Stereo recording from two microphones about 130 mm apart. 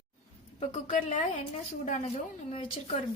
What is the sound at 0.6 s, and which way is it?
A woman's voice, 65° left (ahead or behind).